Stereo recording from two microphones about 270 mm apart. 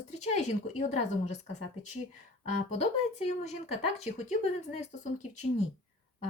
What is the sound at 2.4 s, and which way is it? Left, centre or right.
Speech, left.